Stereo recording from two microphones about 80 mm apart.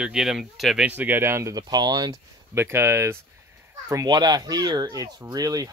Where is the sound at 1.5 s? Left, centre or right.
Right.